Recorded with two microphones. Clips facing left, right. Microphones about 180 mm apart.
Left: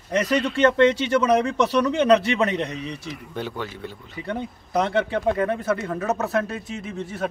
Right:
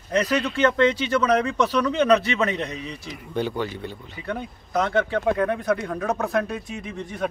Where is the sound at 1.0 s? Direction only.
25° left (ahead or behind).